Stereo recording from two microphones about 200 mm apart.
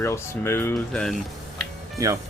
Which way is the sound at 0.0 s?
10° left (ahead or behind).